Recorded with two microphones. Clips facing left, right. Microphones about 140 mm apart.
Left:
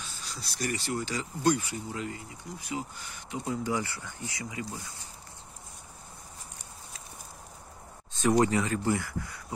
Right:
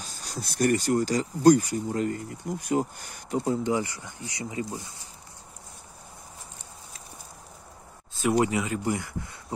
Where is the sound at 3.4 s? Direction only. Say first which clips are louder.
Right 4 dB; 20° right (ahead or behind).